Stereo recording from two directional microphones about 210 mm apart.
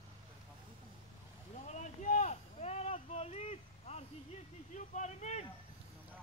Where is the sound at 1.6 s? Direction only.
35° left (ahead or behind).